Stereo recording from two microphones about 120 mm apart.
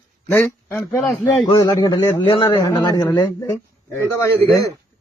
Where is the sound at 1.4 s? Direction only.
40° left (ahead or behind).